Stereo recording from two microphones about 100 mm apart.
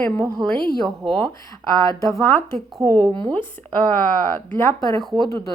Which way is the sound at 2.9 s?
15° left (ahead or behind).